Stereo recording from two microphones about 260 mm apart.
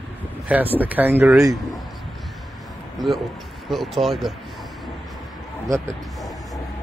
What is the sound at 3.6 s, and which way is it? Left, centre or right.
Speech, centre.